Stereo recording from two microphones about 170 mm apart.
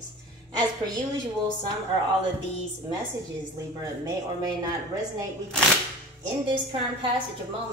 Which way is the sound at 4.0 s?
20° right (ahead or behind).